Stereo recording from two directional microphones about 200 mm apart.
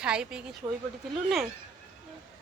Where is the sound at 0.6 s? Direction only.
20° right (ahead or behind).